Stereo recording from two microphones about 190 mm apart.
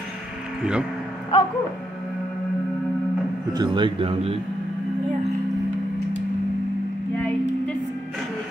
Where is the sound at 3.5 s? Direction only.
25° right (ahead or behind).